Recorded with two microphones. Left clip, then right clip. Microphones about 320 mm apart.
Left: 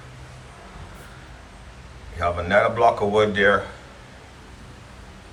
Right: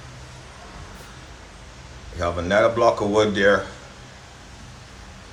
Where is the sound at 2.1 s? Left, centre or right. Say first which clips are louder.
Left 1 dB; centre.